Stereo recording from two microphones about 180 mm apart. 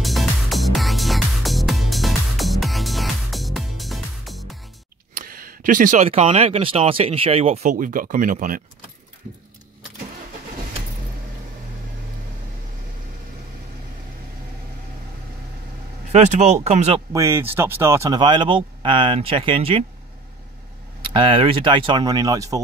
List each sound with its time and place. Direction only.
0.0 s music: centre (ahead or behind)
5.1 s speech: 50° right (ahead or behind); by 7.7 s 35° right (ahead or behind)
7.7 s speech: 50° right (ahead or behind)
16.1 s speech: 40° right (ahead or behind)
17.1 s speech: 15° right (ahead or behind); by 19.8 s 30° right (ahead or behind)
21.0 s speech: 30° right (ahead or behind)